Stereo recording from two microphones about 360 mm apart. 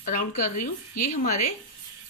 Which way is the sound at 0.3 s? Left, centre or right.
Left.